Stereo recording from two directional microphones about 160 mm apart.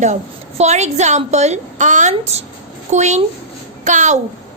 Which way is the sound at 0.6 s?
45° right (ahead or behind).